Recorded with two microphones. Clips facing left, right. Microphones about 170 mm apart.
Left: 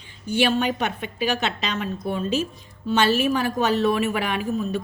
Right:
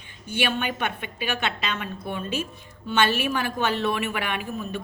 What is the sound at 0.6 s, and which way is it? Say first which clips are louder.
Speech: left 4 dB; 40° left (ahead or behind).